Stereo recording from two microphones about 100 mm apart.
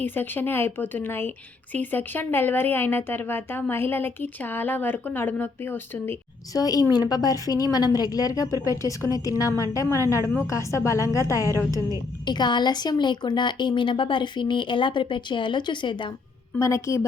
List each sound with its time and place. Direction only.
0.0 s speech: 20° left (ahead or behind)
6.5 s a woman's voice: 40° left (ahead or behind)
11.5 s a woman's voice: 35° right (ahead or behind)
12.2 s a woman's voice: 50° left (ahead or behind)
16.6 s speech: 30° left (ahead or behind)